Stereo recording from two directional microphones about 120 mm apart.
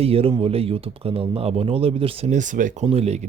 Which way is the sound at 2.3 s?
90° right.